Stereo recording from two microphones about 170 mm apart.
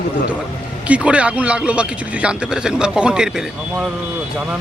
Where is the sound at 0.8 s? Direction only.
5° right (ahead or behind).